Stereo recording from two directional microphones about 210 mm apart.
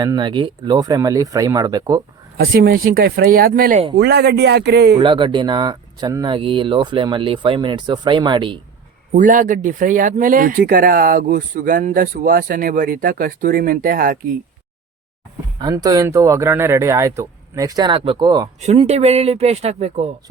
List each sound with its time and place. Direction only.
0.0 s speech: 20° right (ahead or behind)
2.4 s speech: 50° right (ahead or behind)
3.9 s speech: 50° right (ahead or behind)
4.9 s speech: 25° right (ahead or behind)
9.1 s speech: 40° right (ahead or behind)
15.5 s speech: 20° right (ahead or behind)
18.6 s speech: 30° right (ahead or behind)